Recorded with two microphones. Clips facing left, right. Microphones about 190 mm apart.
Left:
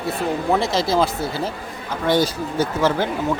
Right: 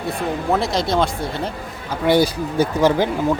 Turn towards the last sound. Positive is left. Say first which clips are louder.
# right 3 dB
turn(degrees=-15)  # may be behind; listen again after turning